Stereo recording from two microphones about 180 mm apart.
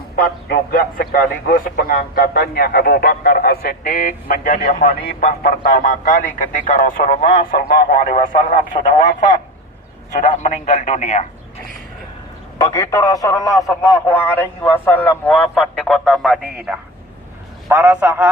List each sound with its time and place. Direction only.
0.2 s a man's voice: 55° left (ahead or behind)
12.5 s a man's voice: 20° left (ahead or behind); by 18.3 s 10° right (ahead or behind)